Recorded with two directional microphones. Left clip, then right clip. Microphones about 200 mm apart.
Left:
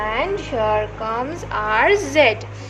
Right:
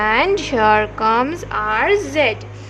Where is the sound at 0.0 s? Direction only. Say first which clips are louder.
Right 6 dB; 50° right (ahead or behind).